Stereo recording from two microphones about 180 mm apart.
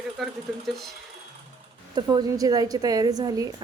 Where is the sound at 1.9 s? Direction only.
20° right (ahead or behind).